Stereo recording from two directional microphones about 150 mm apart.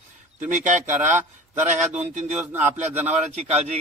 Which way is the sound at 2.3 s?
10° right (ahead or behind).